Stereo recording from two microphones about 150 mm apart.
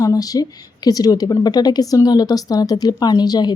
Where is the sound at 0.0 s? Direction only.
25° left (ahead or behind).